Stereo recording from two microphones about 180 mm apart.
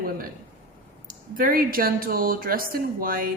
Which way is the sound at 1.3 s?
50° right (ahead or behind).